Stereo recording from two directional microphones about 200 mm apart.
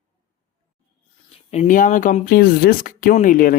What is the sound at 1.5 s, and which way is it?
Speech, 35° left (ahead or behind).